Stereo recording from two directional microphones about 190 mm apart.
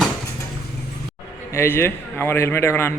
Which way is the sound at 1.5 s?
15° left (ahead or behind).